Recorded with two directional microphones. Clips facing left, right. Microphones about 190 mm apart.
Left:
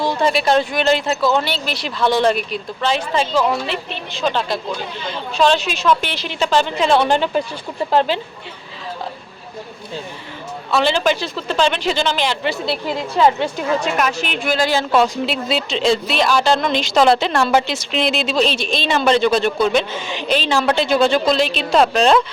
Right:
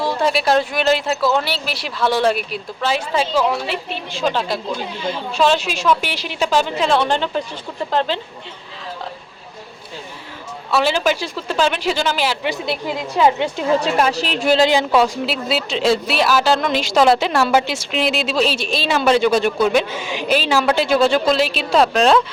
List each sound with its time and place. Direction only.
0.0 s a woman's voice: 5° right (ahead or behind)
10.7 s speech: 5° right (ahead or behind)
13.6 s a woman's voice: 30° right (ahead or behind)
14.7 s a woman's voice: 10° right (ahead or behind)